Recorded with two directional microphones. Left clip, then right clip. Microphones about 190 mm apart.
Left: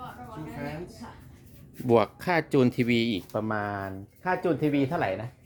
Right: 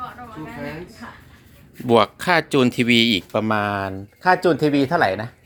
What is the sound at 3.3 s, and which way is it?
Speech, 25° right (ahead or behind).